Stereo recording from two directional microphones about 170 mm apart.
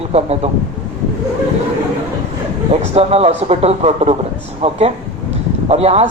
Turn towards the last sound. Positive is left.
turn(degrees=-35)  # may be behind; listen again after turning